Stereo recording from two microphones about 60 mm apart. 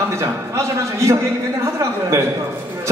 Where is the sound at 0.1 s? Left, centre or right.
Right.